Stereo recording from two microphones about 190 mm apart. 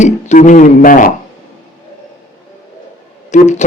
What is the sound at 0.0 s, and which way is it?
Speech, 40° left (ahead or behind).